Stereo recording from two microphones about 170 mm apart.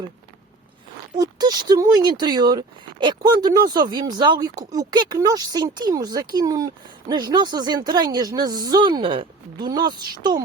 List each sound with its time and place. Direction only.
1.1 s speech: 25° right (ahead or behind)